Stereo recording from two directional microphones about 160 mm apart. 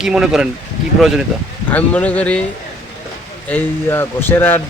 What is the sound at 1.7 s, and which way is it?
Speech, 10° left (ahead or behind).